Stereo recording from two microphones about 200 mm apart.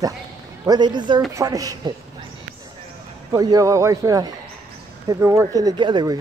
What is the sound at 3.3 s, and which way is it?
Speech, 20° right (ahead or behind).